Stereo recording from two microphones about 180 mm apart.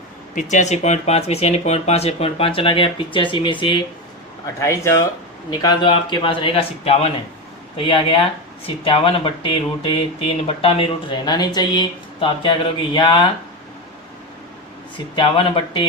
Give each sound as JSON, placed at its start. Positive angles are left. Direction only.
{"t": 0.3, "sound": "speech", "side_deg": 40}
{"t": 4.6, "sound": "speech", "side_deg": 15}
{"t": 15.1, "sound": "speech", "side_deg": 30}